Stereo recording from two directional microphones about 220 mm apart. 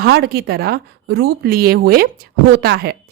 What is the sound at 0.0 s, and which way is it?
A woman's voice, 45° right (ahead or behind).